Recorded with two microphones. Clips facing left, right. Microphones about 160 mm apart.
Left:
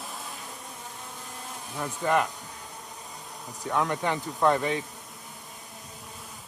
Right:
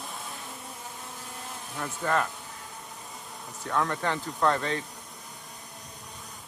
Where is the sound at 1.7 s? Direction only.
10° left (ahead or behind).